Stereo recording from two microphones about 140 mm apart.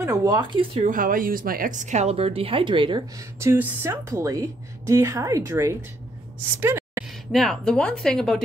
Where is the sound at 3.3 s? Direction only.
20° right (ahead or behind).